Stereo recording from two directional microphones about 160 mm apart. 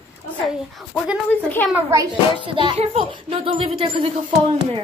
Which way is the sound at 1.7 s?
20° right (ahead or behind).